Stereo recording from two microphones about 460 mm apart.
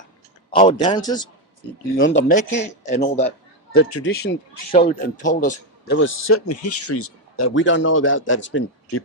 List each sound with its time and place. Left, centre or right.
0.5 s speech: centre
2.0 s speech: left
3.7 s a man's voice: left